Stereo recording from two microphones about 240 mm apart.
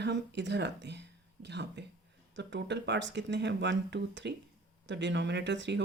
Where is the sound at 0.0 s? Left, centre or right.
Right.